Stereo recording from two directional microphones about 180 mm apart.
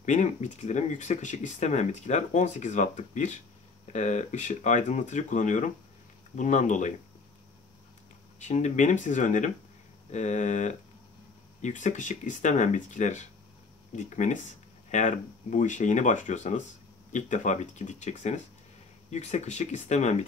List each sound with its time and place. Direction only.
0.0 s speech: 40° left (ahead or behind)
8.4 s speech: 40° left (ahead or behind)